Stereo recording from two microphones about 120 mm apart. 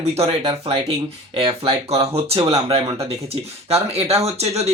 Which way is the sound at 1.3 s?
50° right (ahead or behind).